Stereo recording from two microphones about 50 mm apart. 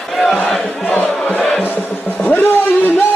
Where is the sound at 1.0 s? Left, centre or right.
Left.